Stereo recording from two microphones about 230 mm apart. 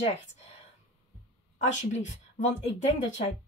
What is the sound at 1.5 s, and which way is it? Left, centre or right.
Speech, left.